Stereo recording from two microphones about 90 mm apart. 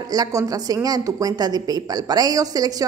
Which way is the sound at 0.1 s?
40° right (ahead or behind).